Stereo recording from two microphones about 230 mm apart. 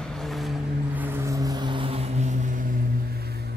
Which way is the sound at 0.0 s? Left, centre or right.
Centre.